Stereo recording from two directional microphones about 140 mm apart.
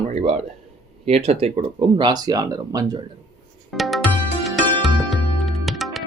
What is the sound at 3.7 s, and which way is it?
Music, centre (ahead or behind).